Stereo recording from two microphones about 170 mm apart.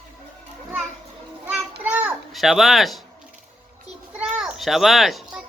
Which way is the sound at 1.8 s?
10° right (ahead or behind).